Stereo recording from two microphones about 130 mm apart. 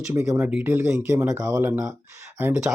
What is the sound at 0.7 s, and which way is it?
Speech, 20° right (ahead or behind).